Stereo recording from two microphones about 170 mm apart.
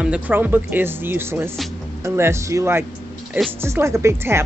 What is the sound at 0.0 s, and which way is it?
Speech, 10° right (ahead or behind).